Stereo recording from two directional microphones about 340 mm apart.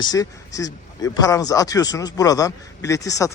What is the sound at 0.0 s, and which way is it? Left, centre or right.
A man's voice, centre.